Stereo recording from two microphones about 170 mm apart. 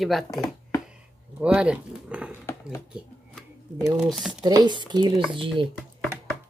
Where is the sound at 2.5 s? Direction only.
15° left (ahead or behind).